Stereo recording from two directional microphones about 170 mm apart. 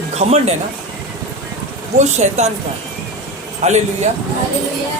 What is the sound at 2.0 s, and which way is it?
Speech, 45° right (ahead or behind).